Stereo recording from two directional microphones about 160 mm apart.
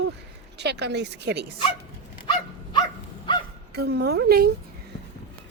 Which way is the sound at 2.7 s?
30° left (ahead or behind).